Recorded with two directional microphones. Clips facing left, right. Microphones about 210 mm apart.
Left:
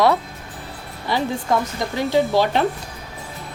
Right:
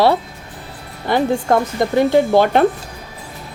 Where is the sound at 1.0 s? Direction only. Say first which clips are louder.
Right 6 dB; 50° right (ahead or behind).